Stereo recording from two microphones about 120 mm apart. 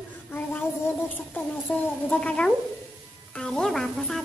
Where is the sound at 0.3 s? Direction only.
15° left (ahead or behind).